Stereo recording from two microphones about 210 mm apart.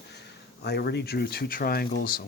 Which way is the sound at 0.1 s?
50° left (ahead or behind).